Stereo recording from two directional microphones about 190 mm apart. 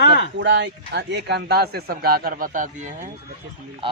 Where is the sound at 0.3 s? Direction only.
70° right (ahead or behind); by 3.1 s 40° right (ahead or behind).